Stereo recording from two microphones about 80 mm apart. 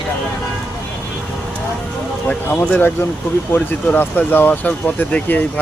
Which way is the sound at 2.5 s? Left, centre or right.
Left.